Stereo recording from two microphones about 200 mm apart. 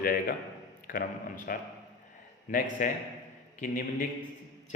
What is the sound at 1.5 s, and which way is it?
A man's voice, 45° left (ahead or behind).